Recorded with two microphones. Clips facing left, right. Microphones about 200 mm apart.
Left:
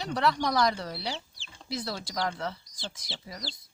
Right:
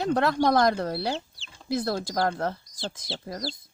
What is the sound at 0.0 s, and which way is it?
Speech, 50° right (ahead or behind).